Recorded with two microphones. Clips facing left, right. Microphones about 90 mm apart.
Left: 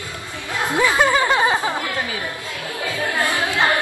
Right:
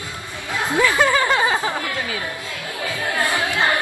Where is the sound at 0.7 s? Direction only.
20° left (ahead or behind).